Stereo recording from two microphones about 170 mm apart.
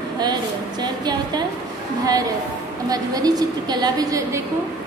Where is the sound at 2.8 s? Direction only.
20° right (ahead or behind).